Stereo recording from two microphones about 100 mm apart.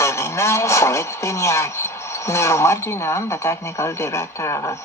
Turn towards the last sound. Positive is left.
turn(degrees=30)  # may be behind; listen again after turning